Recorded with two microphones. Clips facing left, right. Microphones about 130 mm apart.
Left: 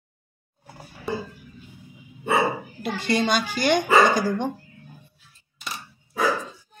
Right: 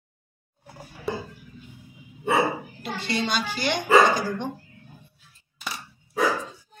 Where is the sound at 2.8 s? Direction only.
50° left (ahead or behind).